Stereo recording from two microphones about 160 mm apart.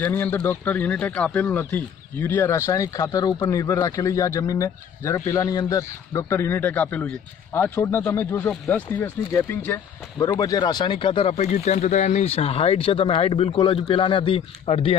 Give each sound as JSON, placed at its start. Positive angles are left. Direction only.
{"t": 0.0, "sound": "speech", "side_deg": 10}